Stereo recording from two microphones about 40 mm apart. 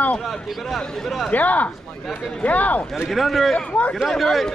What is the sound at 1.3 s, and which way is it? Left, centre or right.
Speech, left.